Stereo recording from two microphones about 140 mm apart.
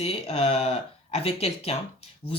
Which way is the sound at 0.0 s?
45° left (ahead or behind).